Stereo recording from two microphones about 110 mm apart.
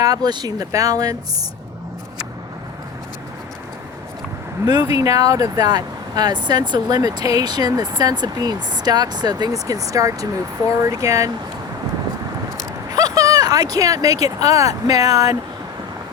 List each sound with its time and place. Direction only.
0.0 s speech: 35° right (ahead or behind)
4.6 s speech: 40° right (ahead or behind)
12.9 s speech: 35° right (ahead or behind)